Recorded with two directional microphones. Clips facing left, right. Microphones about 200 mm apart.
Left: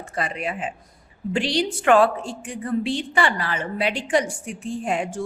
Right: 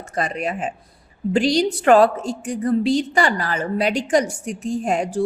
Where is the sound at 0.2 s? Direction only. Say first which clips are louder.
Right 4 dB; 45° right (ahead or behind).